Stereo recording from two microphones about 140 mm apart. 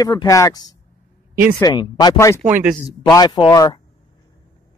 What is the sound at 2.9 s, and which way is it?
Speech, 30° left (ahead or behind).